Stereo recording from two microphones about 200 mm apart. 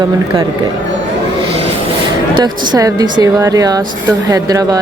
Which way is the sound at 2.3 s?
20° right (ahead or behind).